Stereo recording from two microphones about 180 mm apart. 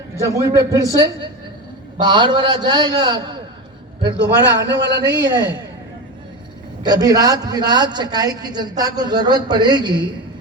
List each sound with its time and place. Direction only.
0.2 s a man's voice: 15° right (ahead or behind)
4.2 s a man's voice: 80° right
5.0 s a man's voice: 25° right (ahead or behind)
6.8 s a man's voice: 20° right (ahead or behind)